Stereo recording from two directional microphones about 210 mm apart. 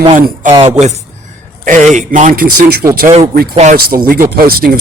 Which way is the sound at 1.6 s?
35° right (ahead or behind).